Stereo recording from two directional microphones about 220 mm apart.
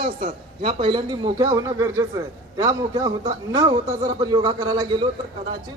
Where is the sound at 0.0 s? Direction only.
25° right (ahead or behind).